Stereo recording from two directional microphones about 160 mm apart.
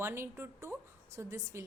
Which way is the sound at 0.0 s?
15° right (ahead or behind).